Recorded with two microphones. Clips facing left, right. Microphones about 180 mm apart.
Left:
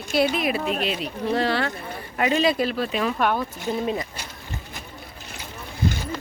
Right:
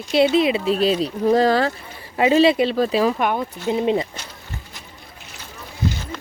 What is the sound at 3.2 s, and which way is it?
Speech, 15° right (ahead or behind).